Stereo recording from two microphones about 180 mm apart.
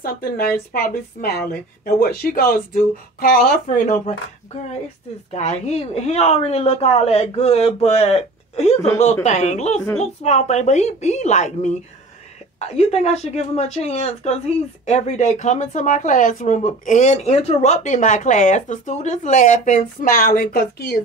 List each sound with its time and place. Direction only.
0.7 s a woman's voice: 55° left (ahead or behind)
3.6 s speech: 45° left (ahead or behind)
5.3 s a woman's voice: 35° left (ahead or behind); by 21.0 s 55° left (ahead or behind)